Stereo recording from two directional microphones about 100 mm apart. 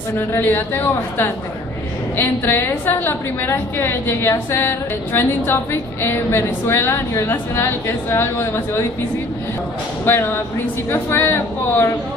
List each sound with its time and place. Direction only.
0.3 s a woman's voice: 20° left (ahead or behind)
10.0 s a woman's voice: 20° left (ahead or behind)